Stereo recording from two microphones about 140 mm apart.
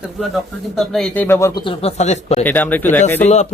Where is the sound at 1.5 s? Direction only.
40° left (ahead or behind).